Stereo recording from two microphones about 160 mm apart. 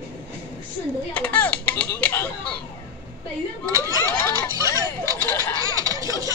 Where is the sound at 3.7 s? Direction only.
20° right (ahead or behind).